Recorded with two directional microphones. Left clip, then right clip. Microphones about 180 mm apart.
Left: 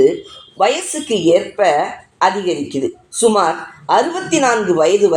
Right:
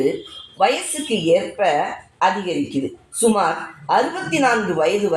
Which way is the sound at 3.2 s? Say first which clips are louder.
Left 4 dB; 35° left (ahead or behind).